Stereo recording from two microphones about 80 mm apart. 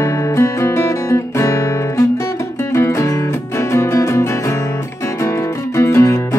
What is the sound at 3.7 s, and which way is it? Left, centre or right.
Music, left.